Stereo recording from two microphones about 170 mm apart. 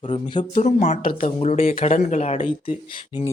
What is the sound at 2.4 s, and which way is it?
Speech, 30° left (ahead or behind).